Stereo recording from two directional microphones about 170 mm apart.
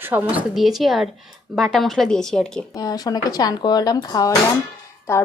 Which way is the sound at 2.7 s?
20° left (ahead or behind).